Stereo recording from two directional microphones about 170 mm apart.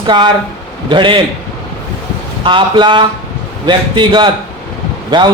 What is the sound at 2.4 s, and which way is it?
Speech, 30° right (ahead or behind).